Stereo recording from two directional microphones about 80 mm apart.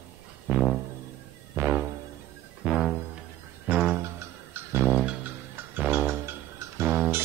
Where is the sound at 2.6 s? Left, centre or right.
Centre.